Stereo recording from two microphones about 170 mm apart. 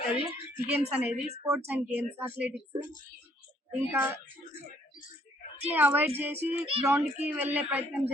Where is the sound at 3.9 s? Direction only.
15° right (ahead or behind).